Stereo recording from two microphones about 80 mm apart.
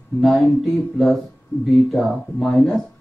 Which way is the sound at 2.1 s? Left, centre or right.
Centre.